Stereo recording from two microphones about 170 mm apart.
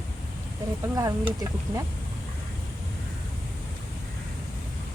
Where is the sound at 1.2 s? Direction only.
20° right (ahead or behind).